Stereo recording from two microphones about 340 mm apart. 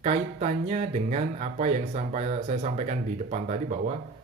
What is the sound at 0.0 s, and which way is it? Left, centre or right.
Speech, centre.